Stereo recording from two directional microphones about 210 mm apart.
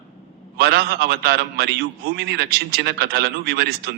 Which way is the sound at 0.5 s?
50° right (ahead or behind).